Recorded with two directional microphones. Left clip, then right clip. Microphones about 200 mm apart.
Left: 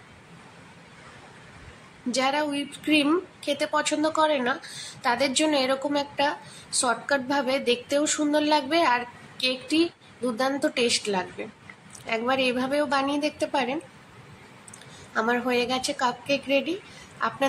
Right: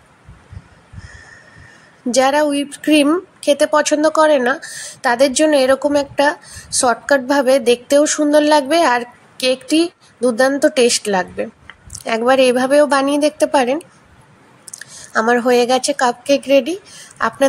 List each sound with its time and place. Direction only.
2.0 s speech: 40° right (ahead or behind)
15.1 s speech: 40° right (ahead or behind)